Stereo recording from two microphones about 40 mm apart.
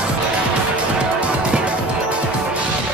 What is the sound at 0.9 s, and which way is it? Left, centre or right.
Music, right.